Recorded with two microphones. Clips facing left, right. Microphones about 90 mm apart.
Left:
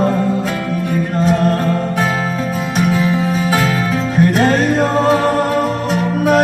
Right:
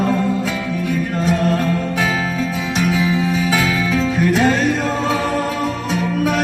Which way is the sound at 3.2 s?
40° left (ahead or behind).